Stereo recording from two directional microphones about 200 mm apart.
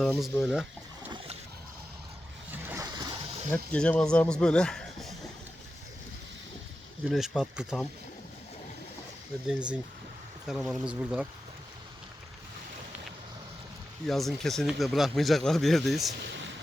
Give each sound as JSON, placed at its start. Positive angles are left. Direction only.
{"t": 0.0, "sound": "speech", "side_deg": 0}
{"t": 2.5, "sound": "a sound", "side_deg": -10}
{"t": 3.5, "sound": "speech", "side_deg": 5}
{"t": 7.1, "sound": "speech", "side_deg": 0}
{"t": 9.5, "sound": "speech", "side_deg": -5}
{"t": 14.1, "sound": "speech", "side_deg": 0}
{"t": 16.2, "sound": "a sound", "side_deg": -60}